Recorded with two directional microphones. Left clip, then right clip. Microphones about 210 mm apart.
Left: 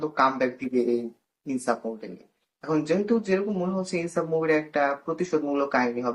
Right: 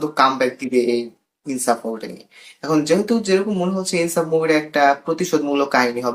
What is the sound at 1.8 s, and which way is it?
Speech, 10° right (ahead or behind).